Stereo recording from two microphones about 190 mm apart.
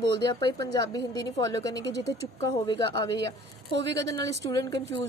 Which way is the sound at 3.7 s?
65° right (ahead or behind).